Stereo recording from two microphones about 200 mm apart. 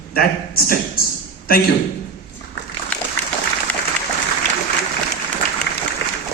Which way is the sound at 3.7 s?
5° left (ahead or behind).